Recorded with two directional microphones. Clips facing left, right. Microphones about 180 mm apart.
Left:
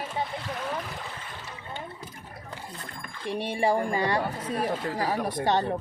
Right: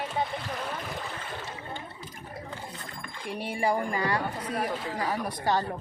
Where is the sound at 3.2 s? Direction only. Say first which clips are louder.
Left 3 dB; 25° left (ahead or behind).